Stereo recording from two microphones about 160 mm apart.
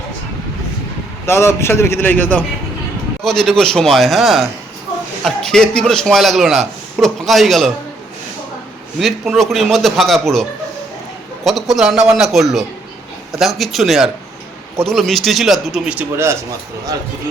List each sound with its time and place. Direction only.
1.3 s a man's voice: 15° left (ahead or behind); by 7.7 s centre (ahead or behind)
9.0 s a man's voice: centre (ahead or behind)
11.4 s a man's voice: centre (ahead or behind); by 16.4 s 15° right (ahead or behind)